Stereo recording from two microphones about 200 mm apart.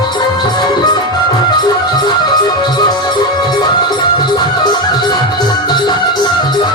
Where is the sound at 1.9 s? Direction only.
20° left (ahead or behind).